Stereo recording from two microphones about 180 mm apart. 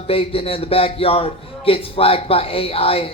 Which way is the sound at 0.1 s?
30° left (ahead or behind).